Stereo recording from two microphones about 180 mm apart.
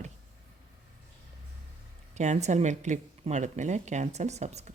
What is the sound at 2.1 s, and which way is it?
Speech, 40° right (ahead or behind).